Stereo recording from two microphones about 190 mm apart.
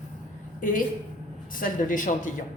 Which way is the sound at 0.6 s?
45° left (ahead or behind).